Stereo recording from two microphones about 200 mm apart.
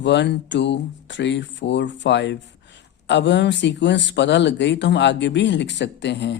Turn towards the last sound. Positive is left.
turn(degrees=60)  # may be behind; listen again after turning